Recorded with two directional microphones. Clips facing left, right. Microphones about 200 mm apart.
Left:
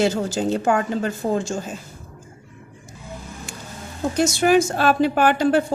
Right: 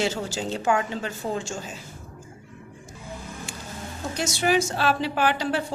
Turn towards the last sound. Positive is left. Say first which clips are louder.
# left 7 dB
turn(degrees=50)  # may be behind; listen again after turning